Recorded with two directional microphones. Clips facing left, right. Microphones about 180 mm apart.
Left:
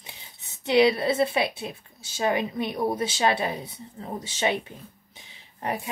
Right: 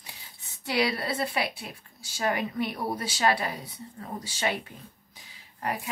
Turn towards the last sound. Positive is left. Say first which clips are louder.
# left 2 dB
turn(degrees=25)  # may be behind; listen again after turning